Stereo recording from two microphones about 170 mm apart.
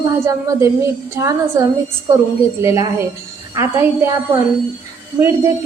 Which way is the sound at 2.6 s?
20° right (ahead or behind).